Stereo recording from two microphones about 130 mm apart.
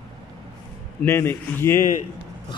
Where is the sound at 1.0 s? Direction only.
20° left (ahead or behind).